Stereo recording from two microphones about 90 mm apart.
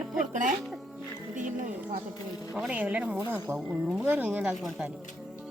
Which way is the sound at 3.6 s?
5° right (ahead or behind).